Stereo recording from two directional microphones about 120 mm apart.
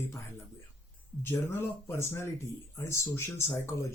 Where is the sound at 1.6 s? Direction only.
20° left (ahead or behind).